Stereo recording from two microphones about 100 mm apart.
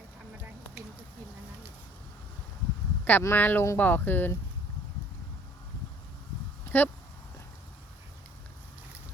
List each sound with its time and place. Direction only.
3.0 s speech: 20° left (ahead or behind)
6.7 s speech: 20° left (ahead or behind)